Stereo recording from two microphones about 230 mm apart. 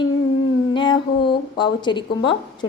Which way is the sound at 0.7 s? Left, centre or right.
Left.